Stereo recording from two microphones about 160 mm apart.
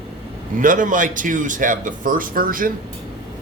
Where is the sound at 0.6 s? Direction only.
55° right (ahead or behind).